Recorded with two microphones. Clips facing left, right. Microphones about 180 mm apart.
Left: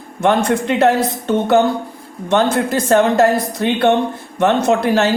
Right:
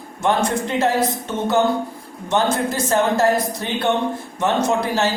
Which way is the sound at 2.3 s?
65° left (ahead or behind).